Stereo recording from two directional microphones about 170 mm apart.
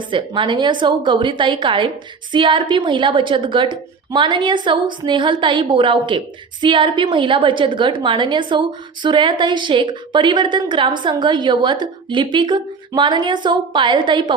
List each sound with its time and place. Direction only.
0.1 s a woman's voice: 30° right (ahead or behind)